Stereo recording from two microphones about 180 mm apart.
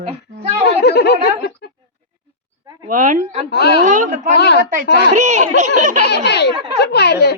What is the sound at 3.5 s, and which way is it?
Speech, 65° left (ahead or behind).